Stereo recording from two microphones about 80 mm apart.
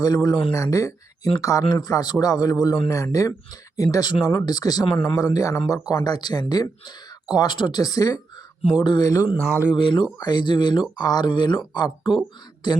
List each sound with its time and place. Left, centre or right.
0.0 s speech: left
5.9 s speech: left
7.3 s speech: left
8.8 s speech: left
9.4 s speech: right
9.8 s speech: left
10.2 s speech: left